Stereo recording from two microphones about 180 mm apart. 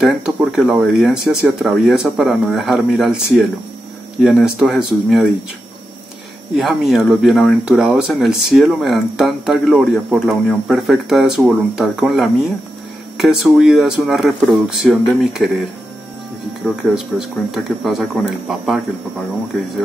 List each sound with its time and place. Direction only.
0.0 s speech: 5° right (ahead or behind)
4.2 s speech: 5° right (ahead or behind)
6.5 s speech: centre (ahead or behind)
17.1 s speech: 5° right (ahead or behind)